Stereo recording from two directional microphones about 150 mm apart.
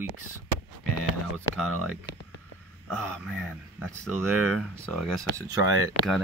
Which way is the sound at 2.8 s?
Centre (ahead or behind).